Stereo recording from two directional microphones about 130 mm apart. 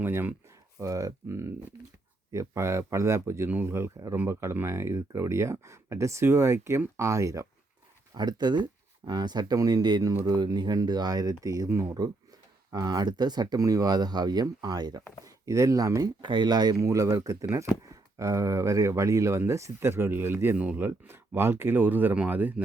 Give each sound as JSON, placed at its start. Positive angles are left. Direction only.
{"t": 0.0, "sound": "speech", "side_deg": -15}